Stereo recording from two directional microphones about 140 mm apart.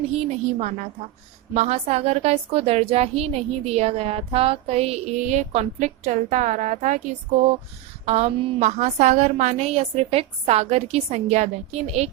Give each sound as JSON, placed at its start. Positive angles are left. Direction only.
{"t": 0.3, "sound": "a woman's voice", "side_deg": -55}
{"t": 8.0, "sound": "a woman's voice", "side_deg": -50}